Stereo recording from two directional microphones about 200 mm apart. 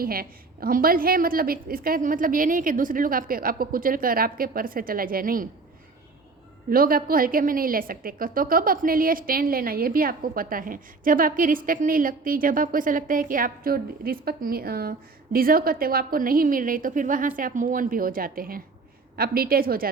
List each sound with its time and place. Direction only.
0.0 s a woman's voice: 45° right (ahead or behind)
6.7 s a woman's voice: 45° right (ahead or behind)